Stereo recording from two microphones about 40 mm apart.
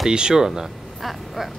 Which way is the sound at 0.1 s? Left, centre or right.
Centre.